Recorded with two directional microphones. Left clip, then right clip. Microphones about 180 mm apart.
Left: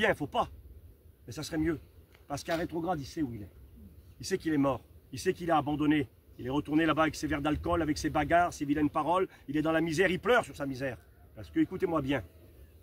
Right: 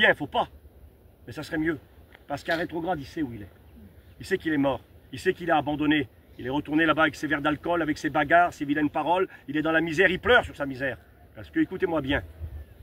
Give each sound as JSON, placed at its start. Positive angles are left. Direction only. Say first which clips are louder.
{"t": 0.0, "sound": "speech", "louder": "right 7 dB", "side_deg": 15}